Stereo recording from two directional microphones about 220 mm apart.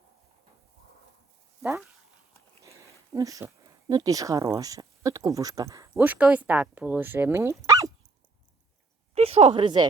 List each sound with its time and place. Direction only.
2.6 s speech: 15° right (ahead or behind)
9.1 s speech: 25° right (ahead or behind)